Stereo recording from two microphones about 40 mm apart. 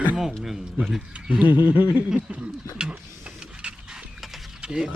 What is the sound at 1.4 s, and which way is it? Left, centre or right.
Snicker, right.